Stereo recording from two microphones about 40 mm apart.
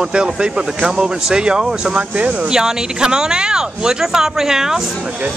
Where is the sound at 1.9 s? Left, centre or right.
Right.